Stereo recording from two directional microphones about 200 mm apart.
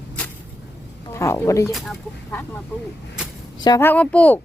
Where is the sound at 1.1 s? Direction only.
15° left (ahead or behind).